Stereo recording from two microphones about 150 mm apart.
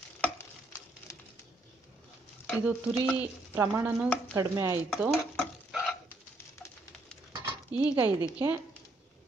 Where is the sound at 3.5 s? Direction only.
15° right (ahead or behind).